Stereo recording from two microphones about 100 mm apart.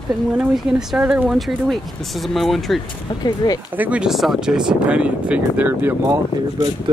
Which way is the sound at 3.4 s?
45° left (ahead or behind).